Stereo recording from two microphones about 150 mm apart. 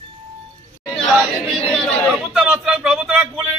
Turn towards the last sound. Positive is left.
turn(degrees=-5)  # may be behind; listen again after turning